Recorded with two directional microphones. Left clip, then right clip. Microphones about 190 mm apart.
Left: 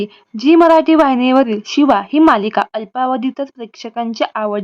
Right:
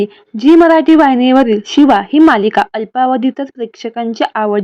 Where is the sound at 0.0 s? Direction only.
10° right (ahead or behind).